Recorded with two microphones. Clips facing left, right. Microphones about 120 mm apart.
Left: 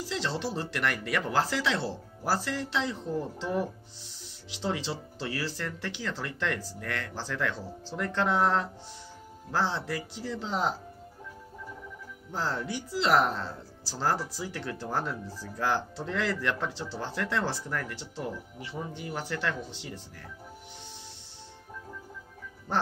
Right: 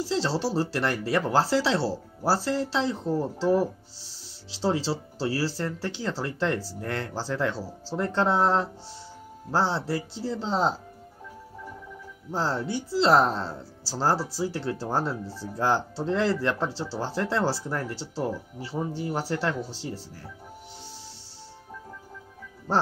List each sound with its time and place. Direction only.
0.0 s speech: 30° right (ahead or behind)
12.3 s speech: 30° right (ahead or behind)